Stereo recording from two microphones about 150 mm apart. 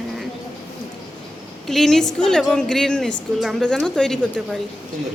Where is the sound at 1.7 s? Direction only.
Centre (ahead or behind).